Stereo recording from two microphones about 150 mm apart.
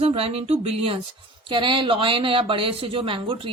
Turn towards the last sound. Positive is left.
turn(degrees=-35)  # may be behind; listen again after turning